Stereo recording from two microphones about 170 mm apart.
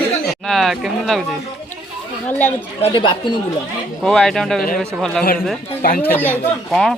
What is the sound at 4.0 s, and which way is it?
Speech, 5° left (ahead or behind).